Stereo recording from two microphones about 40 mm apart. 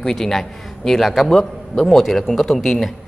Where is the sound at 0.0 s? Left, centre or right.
Centre.